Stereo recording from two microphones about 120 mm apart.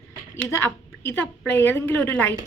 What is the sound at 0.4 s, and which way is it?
A woman's voice, 20° left (ahead or behind).